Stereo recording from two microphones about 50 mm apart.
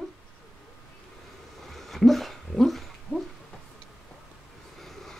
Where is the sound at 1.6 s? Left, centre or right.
Centre.